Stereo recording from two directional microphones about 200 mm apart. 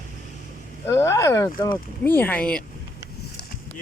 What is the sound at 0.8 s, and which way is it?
Speech, 15° left (ahead or behind).